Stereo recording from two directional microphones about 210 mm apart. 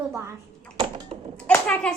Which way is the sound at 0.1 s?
15° right (ahead or behind).